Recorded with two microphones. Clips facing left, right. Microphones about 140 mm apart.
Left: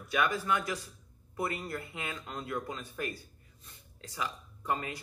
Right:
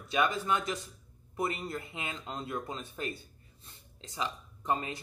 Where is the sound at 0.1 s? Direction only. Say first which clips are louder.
Right 1 dB; 25° right (ahead or behind).